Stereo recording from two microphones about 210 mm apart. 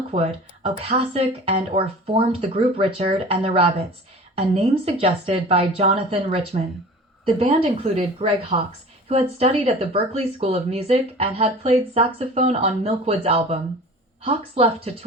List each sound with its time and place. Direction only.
0.1 s speech: 30° right (ahead or behind)